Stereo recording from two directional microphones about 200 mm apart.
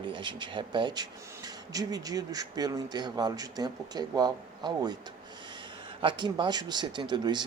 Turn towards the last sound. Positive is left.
turn(degrees=-20)  # may be behind; listen again after turning